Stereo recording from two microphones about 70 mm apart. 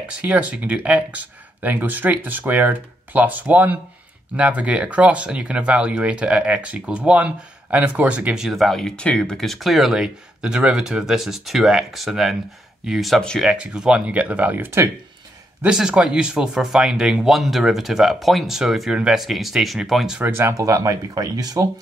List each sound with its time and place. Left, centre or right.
0.2 s speech: centre
8.4 s speech: centre; by 14.8 s right
15.7 s speech: centre
20.2 s speech: right
20.5 s speech: right
21.1 s speech: right